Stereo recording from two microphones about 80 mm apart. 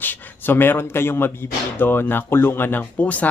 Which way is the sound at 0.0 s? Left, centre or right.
Left.